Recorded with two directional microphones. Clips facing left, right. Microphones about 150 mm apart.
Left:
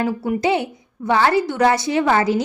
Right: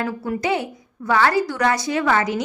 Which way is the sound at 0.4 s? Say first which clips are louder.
Left 3 dB; 25° left (ahead or behind).